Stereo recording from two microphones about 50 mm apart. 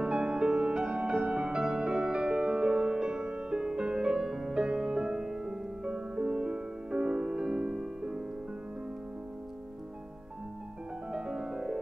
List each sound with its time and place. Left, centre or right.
0.0 s music: centre
11.1 s music: centre